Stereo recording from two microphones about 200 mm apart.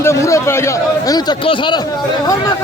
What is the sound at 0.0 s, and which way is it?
Speech, 15° left (ahead or behind).